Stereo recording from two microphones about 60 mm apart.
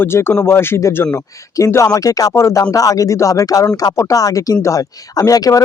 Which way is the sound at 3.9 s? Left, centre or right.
Left.